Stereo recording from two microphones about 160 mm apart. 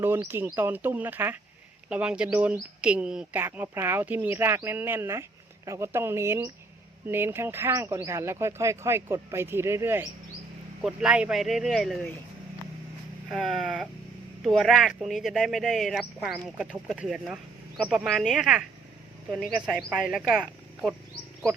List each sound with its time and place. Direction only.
0.0 s speech: 15° right (ahead or behind); by 12.1 s 5° left (ahead or behind)
13.3 s speech: centre (ahead or behind)